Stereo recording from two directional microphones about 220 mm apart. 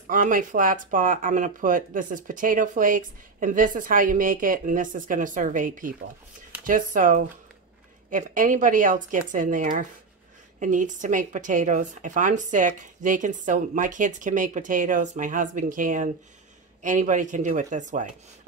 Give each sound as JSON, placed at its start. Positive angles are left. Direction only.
{"t": 0.1, "sound": "speech", "side_deg": -40}